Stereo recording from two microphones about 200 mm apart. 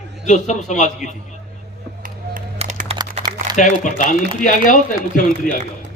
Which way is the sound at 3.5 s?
35° left (ahead or behind).